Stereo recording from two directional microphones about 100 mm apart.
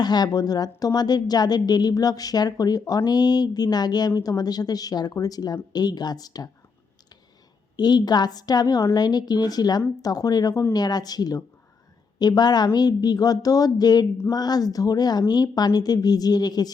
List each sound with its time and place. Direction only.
0.0 s a woman's voice: 45° left (ahead or behind)
7.8 s a woman's voice: 45° left (ahead or behind)